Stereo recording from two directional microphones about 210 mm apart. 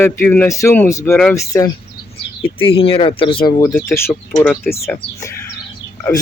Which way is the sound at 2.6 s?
25° left (ahead or behind).